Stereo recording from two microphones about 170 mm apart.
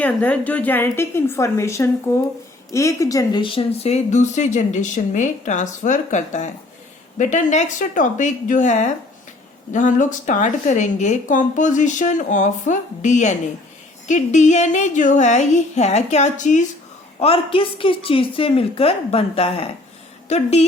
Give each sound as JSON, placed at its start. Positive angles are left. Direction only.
{"t": 0.0, "sound": "a woman's voice", "side_deg": 10}
{"t": 17.2, "sound": "a woman's voice", "side_deg": 35}